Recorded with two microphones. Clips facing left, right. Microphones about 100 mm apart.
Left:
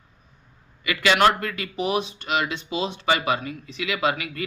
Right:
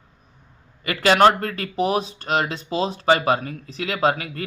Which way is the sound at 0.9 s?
40° right (ahead or behind).